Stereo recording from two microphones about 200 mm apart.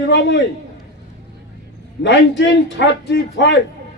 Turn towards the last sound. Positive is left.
turn(degrees=60)  # may be behind; listen again after turning